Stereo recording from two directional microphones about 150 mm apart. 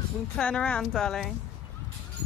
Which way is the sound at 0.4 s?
10° left (ahead or behind).